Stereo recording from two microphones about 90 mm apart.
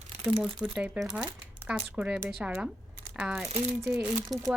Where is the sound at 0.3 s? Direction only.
10° right (ahead or behind).